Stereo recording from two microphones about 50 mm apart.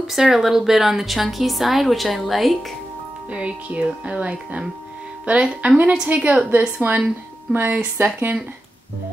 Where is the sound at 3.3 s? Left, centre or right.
Right.